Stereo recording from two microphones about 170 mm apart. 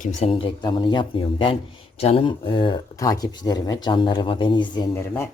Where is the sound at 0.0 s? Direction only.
35° left (ahead or behind).